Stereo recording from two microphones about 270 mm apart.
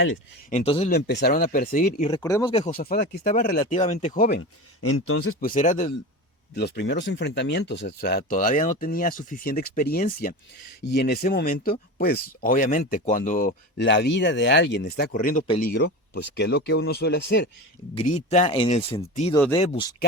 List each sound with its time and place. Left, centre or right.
0.5 s speech: left
0.9 s speech: left
2.0 s speech: centre
4.4 s speech: left
5.4 s speech: left
17.9 s speech: left